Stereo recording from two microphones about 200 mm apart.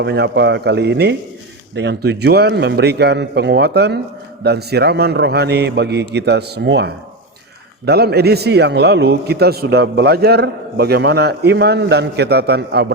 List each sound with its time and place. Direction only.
0.0 s a man's voice: 55° right (ahead or behind)